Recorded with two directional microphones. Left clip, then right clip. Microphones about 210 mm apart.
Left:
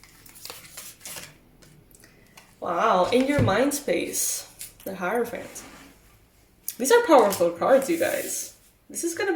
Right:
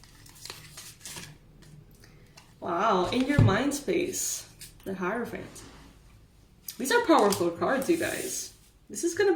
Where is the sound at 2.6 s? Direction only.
30° left (ahead or behind).